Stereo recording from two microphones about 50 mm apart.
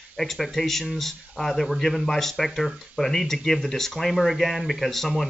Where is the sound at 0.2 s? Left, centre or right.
Centre.